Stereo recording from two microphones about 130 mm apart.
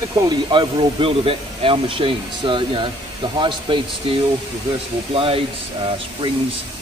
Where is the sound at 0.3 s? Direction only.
35° right (ahead or behind).